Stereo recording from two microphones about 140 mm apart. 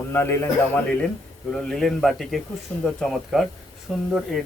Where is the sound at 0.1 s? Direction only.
15° left (ahead or behind).